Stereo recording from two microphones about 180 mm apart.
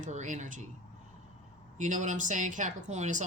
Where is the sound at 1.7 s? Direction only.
45° right (ahead or behind).